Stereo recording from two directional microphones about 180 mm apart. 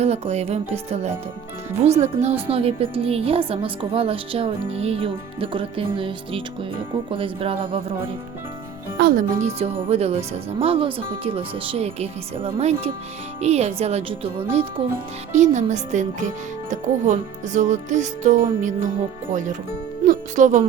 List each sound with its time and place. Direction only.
0.0 s a woman's voice: 35° right (ahead or behind)
9.0 s a woman's voice: 50° right (ahead or behind); by 14.7 s 30° right (ahead or behind)
15.4 s speech: 40° right (ahead or behind)